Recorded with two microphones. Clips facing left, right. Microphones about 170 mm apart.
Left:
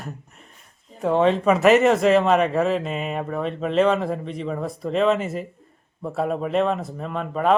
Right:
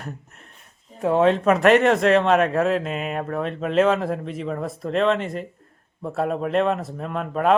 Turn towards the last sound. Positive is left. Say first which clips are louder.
# right 1 dB
turn(degrees=0)  # may be behind; listen again after turning